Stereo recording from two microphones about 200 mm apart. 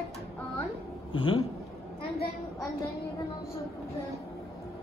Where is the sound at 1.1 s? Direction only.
25° left (ahead or behind).